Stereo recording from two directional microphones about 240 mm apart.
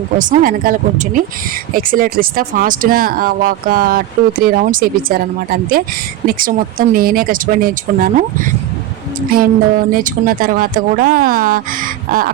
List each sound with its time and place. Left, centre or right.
0.2 s speech: right
6.2 s speech: right
9.3 s speech: right